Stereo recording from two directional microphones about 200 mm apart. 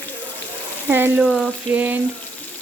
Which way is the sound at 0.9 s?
10° right (ahead or behind).